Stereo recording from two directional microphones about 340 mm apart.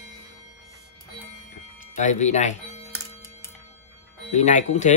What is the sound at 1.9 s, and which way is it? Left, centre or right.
Speech, left.